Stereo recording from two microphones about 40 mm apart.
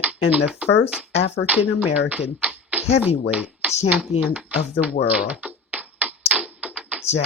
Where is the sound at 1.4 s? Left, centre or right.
Right.